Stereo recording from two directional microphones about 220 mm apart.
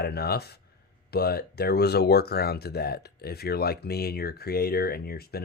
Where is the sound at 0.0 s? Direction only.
45° left (ahead or behind).